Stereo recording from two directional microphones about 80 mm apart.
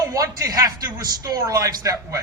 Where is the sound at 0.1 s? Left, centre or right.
Right.